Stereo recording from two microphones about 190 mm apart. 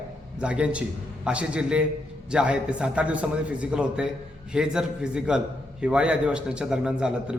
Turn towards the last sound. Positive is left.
turn(degrees=-5)  # may be behind; listen again after turning